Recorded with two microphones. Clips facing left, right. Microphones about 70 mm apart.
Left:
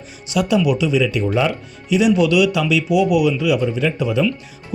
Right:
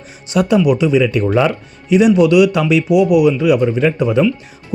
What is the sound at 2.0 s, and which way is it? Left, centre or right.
Speech, right.